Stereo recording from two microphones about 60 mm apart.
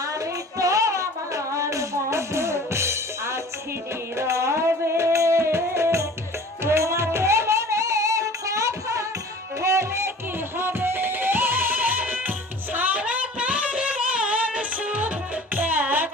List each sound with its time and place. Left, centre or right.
0.6 s music: right
4.2 s music: right
10.6 s music: right